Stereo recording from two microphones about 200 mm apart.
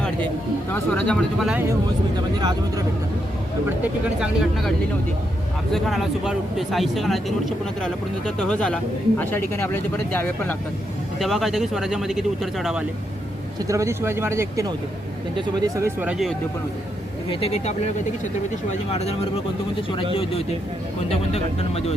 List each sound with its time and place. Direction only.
0.7 s speech: 5° left (ahead or behind)
2.1 s speech: 20° right (ahead or behind)
4.2 s speech: centre (ahead or behind)
5.7 s speech: centre (ahead or behind)
13.7 s speech: 15° right (ahead or behind)
17.2 s speech: 30° left (ahead or behind)
21.1 s speech: 30° left (ahead or behind)